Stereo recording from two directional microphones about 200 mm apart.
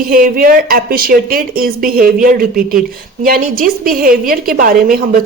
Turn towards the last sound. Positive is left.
turn(degrees=-45)  # may be behind; listen again after turning